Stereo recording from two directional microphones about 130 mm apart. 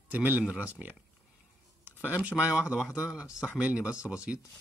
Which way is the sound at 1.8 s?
15° right (ahead or behind).